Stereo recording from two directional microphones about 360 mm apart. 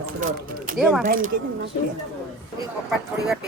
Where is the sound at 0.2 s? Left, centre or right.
Right.